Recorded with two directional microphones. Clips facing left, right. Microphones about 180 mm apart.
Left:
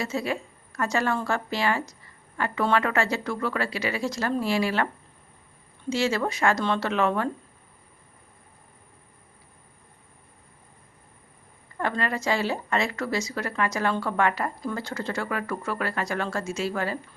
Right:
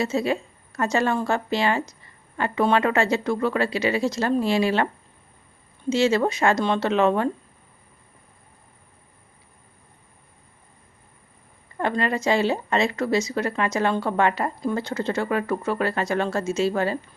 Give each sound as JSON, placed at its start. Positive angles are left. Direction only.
{"t": 0.0, "sound": "speech", "side_deg": -25}
{"t": 5.9, "sound": "speech", "side_deg": -20}
{"t": 11.8, "sound": "speech", "side_deg": -20}